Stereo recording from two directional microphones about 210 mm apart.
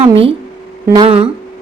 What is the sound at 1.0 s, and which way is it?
Speech, 30° right (ahead or behind).